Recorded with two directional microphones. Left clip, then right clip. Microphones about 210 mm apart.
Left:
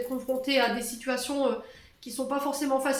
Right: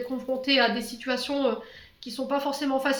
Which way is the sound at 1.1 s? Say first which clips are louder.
Right 1 dB; 45° right (ahead or behind).